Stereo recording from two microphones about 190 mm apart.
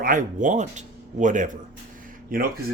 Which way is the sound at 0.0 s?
45° right (ahead or behind).